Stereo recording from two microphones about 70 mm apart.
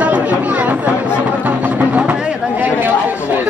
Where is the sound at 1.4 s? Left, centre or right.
Right.